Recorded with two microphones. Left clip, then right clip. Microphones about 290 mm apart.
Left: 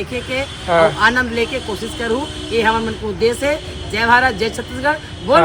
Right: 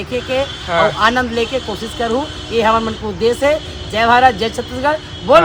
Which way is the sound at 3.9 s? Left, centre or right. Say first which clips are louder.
Right 3 dB; right.